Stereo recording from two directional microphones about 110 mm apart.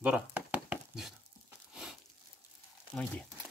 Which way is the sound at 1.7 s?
5° right (ahead or behind).